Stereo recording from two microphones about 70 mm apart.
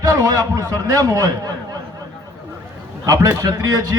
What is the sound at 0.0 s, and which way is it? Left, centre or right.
A man's voice, right.